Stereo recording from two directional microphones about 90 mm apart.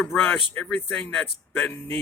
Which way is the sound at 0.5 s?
15° left (ahead or behind).